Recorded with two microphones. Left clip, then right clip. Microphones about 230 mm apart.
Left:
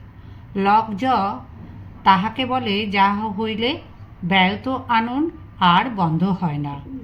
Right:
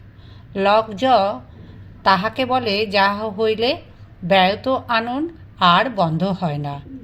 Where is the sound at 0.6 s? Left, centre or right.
Right.